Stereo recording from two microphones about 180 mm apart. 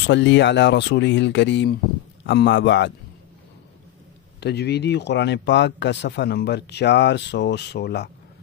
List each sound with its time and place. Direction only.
0.0 s speech: 80° left
4.4 s speech: 65° left (ahead or behind)